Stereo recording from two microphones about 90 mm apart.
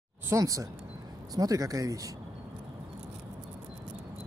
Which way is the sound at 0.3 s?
35° right (ahead or behind).